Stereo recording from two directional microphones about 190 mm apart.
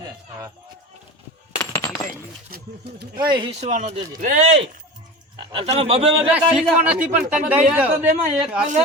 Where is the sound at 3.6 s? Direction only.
40° right (ahead or behind).